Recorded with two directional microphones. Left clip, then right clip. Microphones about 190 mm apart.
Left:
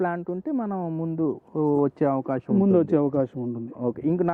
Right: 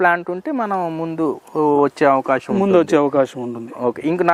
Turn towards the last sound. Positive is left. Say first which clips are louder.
# right 6 dB
turn(degrees=-15)  # may be behind; listen again after turning